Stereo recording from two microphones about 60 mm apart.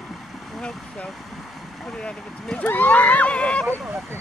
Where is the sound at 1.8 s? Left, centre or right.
Centre.